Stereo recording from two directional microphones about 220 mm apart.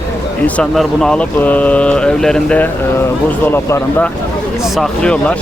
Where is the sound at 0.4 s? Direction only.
5° left (ahead or behind).